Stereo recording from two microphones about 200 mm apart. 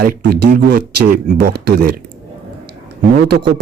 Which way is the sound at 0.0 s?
55° right (ahead or behind).